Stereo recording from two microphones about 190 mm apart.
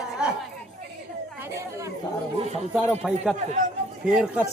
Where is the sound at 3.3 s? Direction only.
40° right (ahead or behind).